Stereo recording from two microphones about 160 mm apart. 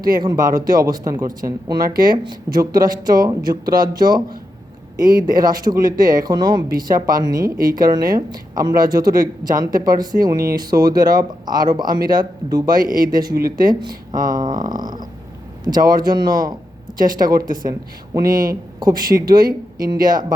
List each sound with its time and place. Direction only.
0.2 s speech: 25° right (ahead or behind)
5.2 s speech: 25° right (ahead or behind)
18.2 s speech: 60° right (ahead or behind)
18.8 s speech: 25° right (ahead or behind)